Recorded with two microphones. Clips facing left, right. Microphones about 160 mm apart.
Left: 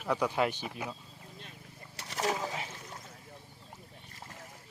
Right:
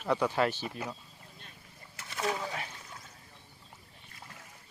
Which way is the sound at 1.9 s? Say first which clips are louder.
Left 2 dB; 35° left (ahead or behind).